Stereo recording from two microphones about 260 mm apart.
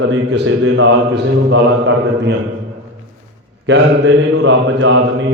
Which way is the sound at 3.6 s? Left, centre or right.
Right.